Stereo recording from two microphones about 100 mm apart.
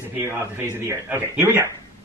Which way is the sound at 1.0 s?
20° right (ahead or behind).